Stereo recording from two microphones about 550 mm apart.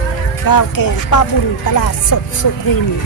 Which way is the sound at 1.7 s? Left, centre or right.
Left.